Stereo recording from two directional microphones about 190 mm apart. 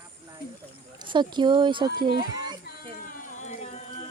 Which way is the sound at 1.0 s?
25° right (ahead or behind).